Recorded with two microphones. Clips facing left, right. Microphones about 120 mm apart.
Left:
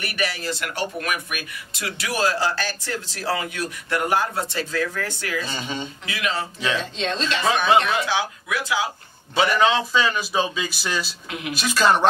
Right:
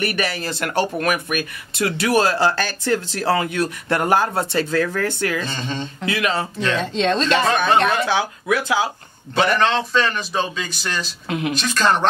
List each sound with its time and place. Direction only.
0.0 s speech: 55° right (ahead or behind)
5.5 s a man's voice: 10° left (ahead or behind)
6.0 s speech: 55° right (ahead or behind)
7.8 s speech: 45° right (ahead or behind)
9.3 s a man's voice: 5° left (ahead or behind)